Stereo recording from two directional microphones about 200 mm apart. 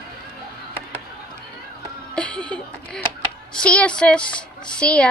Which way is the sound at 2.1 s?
5° left (ahead or behind).